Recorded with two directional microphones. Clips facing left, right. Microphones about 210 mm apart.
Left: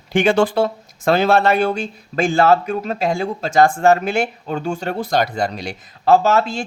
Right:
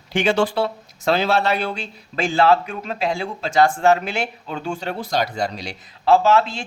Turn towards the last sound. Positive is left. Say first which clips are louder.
# left 1 dB
turn(degrees=40)  # may be behind; listen again after turning